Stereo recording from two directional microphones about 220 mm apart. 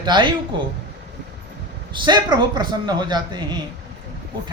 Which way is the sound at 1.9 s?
20° right (ahead or behind).